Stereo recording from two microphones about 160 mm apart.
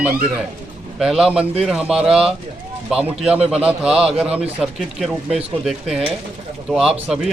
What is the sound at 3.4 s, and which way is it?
Speech, 40° right (ahead or behind).